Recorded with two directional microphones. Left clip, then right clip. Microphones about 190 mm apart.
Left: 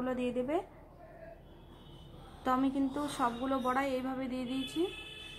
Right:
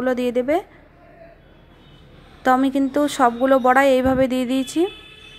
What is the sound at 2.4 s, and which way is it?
A woman's voice, 30° right (ahead or behind).